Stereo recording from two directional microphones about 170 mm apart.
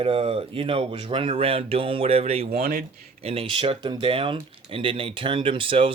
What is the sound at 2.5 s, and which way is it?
Speech, 60° right (ahead or behind).